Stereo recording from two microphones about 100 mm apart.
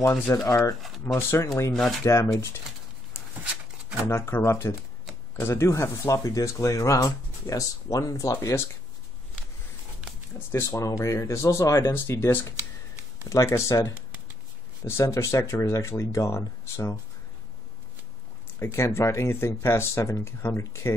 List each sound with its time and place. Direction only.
0.5 s speech: 35° left (ahead or behind)
1.7 s speech: centre (ahead or behind)
2.0 s speech: 30° left (ahead or behind)
3.1 s a sound: 10° right (ahead or behind)
4.0 s speech: 25° left (ahead or behind)
10.5 s speech: 30° left (ahead or behind)
13.9 s a sound: 15° right (ahead or behind)
14.9 s speech: 25° left (ahead or behind)
18.6 s speech: 25° left (ahead or behind)